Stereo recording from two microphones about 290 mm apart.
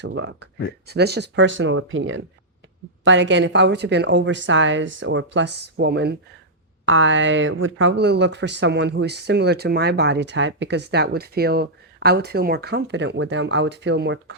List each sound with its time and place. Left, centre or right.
0.0 s speech: right